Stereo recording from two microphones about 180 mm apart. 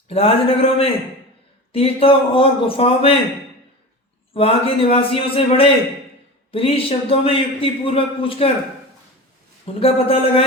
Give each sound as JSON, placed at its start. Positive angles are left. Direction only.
{"t": 0.1, "sound": "a man's voice", "side_deg": 30}
{"t": 4.4, "sound": "a man's voice", "side_deg": 30}
{"t": 9.6, "sound": "a man's voice", "side_deg": 30}